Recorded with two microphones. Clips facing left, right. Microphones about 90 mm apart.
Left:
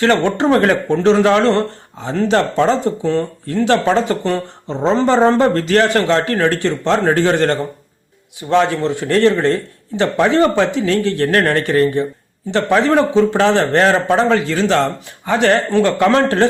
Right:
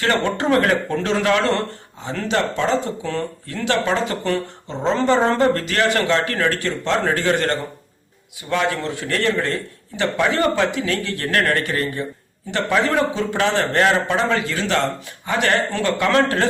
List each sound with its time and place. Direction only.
0.0 s speech: 30° left (ahead or behind)